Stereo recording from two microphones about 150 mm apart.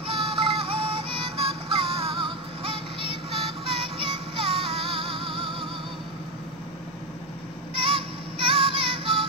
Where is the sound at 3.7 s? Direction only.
40° right (ahead or behind).